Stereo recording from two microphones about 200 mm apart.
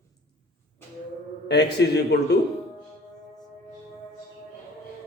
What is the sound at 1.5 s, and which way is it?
Speech, 55° left (ahead or behind).